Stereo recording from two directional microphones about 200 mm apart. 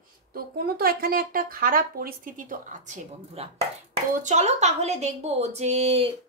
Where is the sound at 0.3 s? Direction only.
50° right (ahead or behind).